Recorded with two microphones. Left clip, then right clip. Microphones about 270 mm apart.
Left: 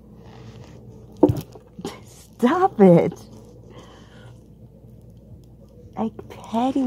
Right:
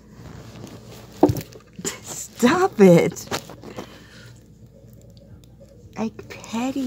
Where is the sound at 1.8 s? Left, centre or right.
Right.